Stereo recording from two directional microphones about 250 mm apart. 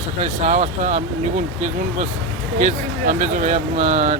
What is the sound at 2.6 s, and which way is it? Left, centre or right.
Speech, right.